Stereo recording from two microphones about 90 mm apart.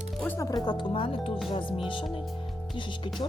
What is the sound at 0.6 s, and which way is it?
Speech, 65° left (ahead or behind).